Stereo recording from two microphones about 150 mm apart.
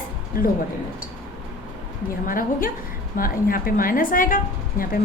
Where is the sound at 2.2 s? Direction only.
70° left (ahead or behind).